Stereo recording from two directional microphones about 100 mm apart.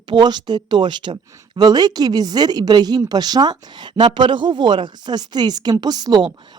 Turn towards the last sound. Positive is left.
turn(degrees=-40)  # may be behind; listen again after turning